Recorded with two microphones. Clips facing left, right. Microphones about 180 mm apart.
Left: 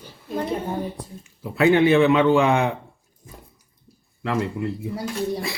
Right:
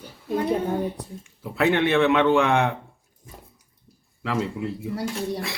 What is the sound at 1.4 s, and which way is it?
Speech, centre (ahead or behind).